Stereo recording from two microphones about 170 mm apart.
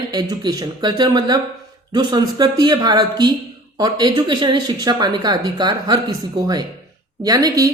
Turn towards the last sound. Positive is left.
turn(degrees=-20)  # may be behind; listen again after turning